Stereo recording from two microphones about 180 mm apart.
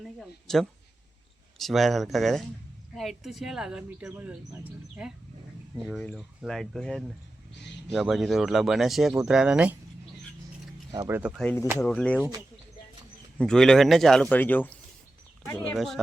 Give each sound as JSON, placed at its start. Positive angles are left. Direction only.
{"t": 0.0, "sound": "speech", "side_deg": 0}
{"t": 10.9, "sound": "speech", "side_deg": -20}
{"t": 11.2, "sound": "speech", "side_deg": -5}
{"t": 11.8, "sound": "speech", "side_deg": 5}
{"t": 12.1, "sound": "speech", "side_deg": -10}
{"t": 13.4, "sound": "speech", "side_deg": 5}